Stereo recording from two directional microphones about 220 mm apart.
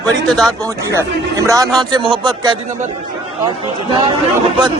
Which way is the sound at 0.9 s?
15° right (ahead or behind).